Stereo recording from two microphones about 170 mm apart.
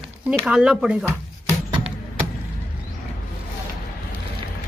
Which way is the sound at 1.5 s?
30° right (ahead or behind).